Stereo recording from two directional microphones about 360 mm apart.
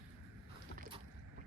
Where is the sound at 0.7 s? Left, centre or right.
Right.